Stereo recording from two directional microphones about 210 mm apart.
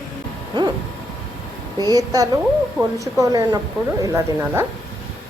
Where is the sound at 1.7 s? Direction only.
20° right (ahead or behind).